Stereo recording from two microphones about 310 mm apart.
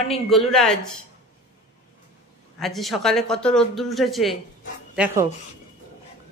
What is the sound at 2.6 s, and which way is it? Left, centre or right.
Speech, centre.